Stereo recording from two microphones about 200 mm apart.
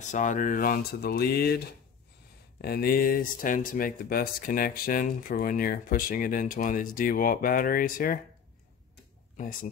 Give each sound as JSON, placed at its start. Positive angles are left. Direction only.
{"t": 0.1, "sound": "speech", "side_deg": 40}
{"t": 9.4, "sound": "speech", "side_deg": 45}